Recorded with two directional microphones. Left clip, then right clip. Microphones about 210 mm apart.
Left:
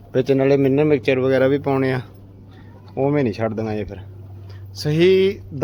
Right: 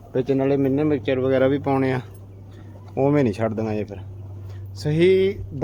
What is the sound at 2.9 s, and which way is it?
Speech, centre (ahead or behind).